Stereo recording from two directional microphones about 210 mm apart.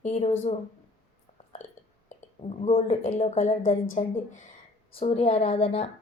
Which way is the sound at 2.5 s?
30° left (ahead or behind).